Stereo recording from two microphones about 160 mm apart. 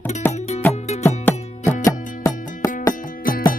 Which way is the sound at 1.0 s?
15° left (ahead or behind).